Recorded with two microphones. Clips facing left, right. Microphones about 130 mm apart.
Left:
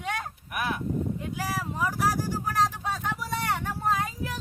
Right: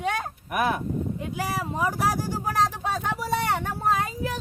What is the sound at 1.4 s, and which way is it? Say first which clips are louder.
Speech: right 5 dB; 25° right (ahead or behind).